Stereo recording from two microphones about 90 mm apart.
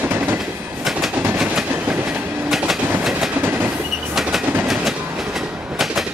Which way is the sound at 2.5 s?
5° right (ahead or behind).